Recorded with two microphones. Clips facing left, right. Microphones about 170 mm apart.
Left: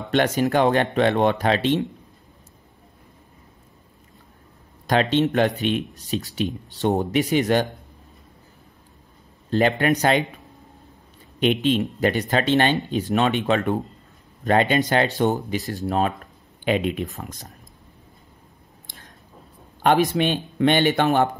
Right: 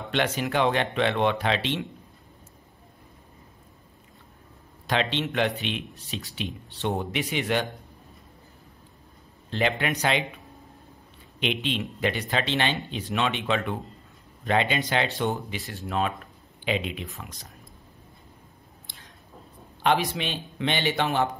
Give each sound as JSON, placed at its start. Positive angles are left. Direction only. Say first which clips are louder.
{"t": 0.1, "sound": "speech", "louder": "left 7 dB", "side_deg": 45}
{"t": 4.8, "sound": "speech", "louder": "left 7 dB", "side_deg": 45}
{"t": 9.5, "sound": "speech", "louder": "left 7 dB", "side_deg": 45}
{"t": 11.3, "sound": "speech", "louder": "left 9 dB", "side_deg": 45}
{"t": 16.6, "sound": "speech", "louder": "left 7 dB", "side_deg": 50}
{"t": 19.8, "sound": "speech", "louder": "left 6 dB", "side_deg": 50}